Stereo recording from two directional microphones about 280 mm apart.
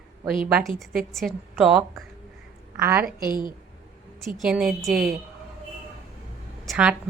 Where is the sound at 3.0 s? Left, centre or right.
Right.